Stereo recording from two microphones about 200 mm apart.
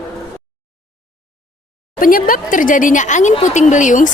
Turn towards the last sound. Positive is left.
turn(degrees=40)  # may be behind; listen again after turning